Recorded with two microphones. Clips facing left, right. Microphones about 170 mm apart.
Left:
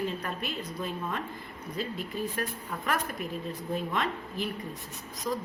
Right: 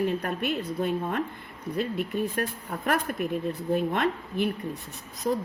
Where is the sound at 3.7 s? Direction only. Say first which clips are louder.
Right 6 dB; 60° right (ahead or behind).